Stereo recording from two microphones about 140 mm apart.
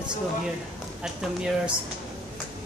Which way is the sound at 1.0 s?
5° right (ahead or behind).